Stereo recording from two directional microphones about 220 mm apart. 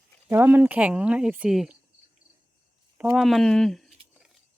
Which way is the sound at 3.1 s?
Centre (ahead or behind).